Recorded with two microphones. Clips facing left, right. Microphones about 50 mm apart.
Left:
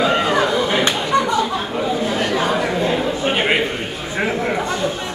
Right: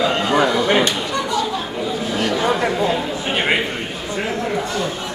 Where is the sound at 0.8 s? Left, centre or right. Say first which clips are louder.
Left 4 dB; left.